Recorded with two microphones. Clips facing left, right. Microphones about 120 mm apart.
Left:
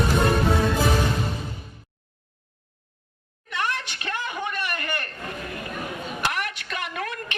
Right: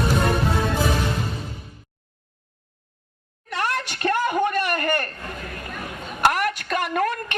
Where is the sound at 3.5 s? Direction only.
40° right (ahead or behind).